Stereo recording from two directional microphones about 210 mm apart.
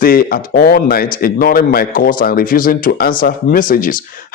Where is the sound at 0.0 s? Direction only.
45° left (ahead or behind).